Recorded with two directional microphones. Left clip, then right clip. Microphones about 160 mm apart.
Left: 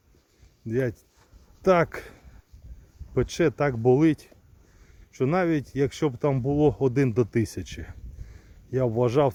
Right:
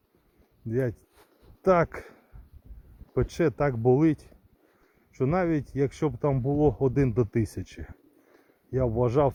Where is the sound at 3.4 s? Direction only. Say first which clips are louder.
Left 2 dB; 25° left (ahead or behind).